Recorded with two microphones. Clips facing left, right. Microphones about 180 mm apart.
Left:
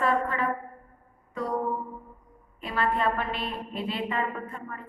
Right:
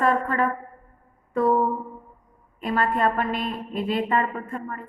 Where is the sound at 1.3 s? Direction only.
55° right (ahead or behind).